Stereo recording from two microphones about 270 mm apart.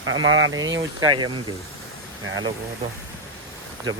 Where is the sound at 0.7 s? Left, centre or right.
Centre.